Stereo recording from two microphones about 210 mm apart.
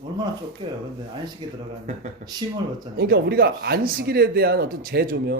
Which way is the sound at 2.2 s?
35° right (ahead or behind).